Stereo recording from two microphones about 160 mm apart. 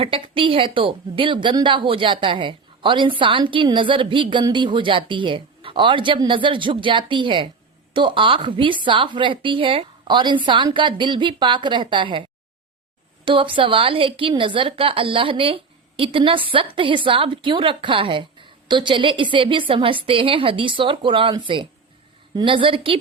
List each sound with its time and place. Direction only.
0.0 s a woman's voice: 35° right (ahead or behind)
13.2 s a woman's voice: 30° right (ahead or behind)